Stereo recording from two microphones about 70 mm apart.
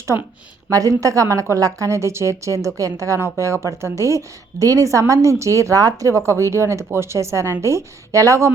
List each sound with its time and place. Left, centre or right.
0.7 s a woman's voice: right